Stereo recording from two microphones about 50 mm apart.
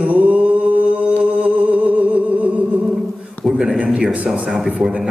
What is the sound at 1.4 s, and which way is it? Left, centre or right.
Music, right.